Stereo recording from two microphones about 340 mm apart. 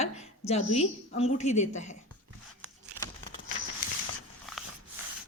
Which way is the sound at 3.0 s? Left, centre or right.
Centre.